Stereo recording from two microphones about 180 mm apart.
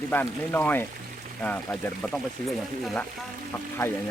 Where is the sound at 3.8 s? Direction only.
15° left (ahead or behind).